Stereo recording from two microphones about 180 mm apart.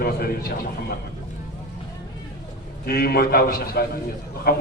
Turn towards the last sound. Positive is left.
turn(degrees=55)  # may be behind; listen again after turning